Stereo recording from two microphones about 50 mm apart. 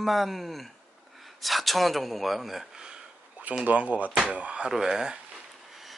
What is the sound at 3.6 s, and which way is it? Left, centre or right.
Speech, right.